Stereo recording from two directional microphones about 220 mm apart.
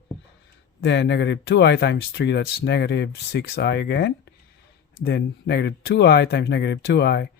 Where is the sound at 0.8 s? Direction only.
50° left (ahead or behind).